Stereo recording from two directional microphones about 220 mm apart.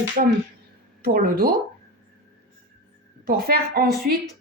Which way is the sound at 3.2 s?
45° right (ahead or behind).